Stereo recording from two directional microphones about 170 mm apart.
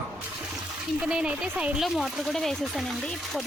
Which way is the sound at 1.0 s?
5° right (ahead or behind).